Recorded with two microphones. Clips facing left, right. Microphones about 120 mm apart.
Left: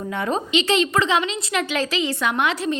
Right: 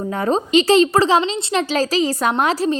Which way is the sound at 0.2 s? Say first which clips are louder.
Right 6 dB; 35° right (ahead or behind).